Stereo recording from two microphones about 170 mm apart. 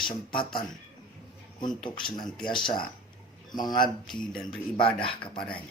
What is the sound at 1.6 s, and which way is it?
Speech, 30° left (ahead or behind).